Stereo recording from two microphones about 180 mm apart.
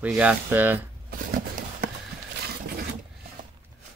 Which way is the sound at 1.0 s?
55° right (ahead or behind).